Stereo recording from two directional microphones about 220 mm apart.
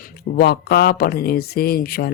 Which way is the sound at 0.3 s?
45° left (ahead or behind).